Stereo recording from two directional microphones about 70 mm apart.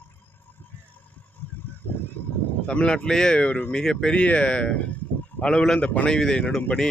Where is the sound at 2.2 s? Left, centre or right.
Left.